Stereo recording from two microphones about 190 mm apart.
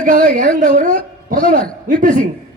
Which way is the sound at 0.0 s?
45° right (ahead or behind).